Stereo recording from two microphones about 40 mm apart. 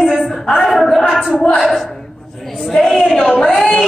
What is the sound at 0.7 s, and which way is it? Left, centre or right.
Speech, centre.